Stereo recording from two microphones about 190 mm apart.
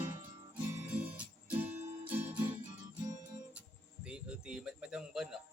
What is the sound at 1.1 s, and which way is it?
Music, 10° right (ahead or behind).